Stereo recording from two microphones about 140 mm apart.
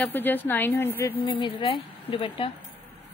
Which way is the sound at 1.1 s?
35° left (ahead or behind).